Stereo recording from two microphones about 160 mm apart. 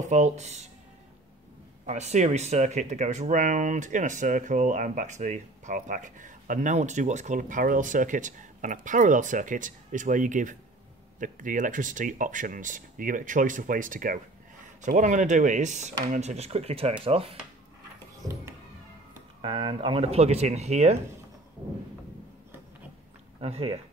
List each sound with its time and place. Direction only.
0.0 s speech: 45° right (ahead or behind)
1.9 s speech: 45° right (ahead or behind)
18.2 s music: centre (ahead or behind)
19.4 s speech: 35° right (ahead or behind)
23.4 s speech: 40° right (ahead or behind)